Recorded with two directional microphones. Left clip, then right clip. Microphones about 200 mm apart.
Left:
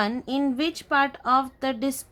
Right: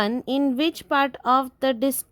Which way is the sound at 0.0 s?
35° right (ahead or behind).